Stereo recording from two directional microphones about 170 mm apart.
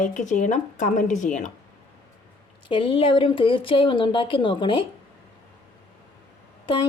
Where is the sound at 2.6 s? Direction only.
30° left (ahead or behind).